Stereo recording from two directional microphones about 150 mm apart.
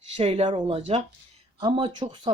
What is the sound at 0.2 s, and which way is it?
A man's voice, 40° right (ahead or behind).